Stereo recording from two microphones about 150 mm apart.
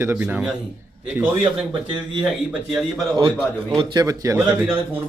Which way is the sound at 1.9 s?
35° right (ahead or behind).